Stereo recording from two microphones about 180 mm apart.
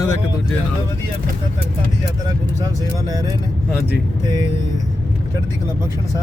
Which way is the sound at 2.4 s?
20° right (ahead or behind).